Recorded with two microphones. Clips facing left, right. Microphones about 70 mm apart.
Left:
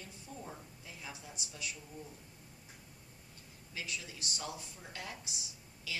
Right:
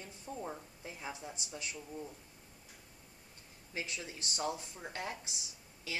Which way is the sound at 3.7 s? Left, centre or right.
Right.